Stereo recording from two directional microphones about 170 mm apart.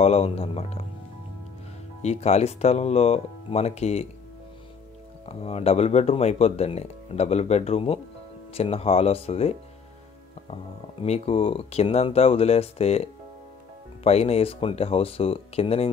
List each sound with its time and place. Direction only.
0.0 s speech: 35° left (ahead or behind)
2.0 s speech: 40° left (ahead or behind)
5.2 s speech: 35° left (ahead or behind)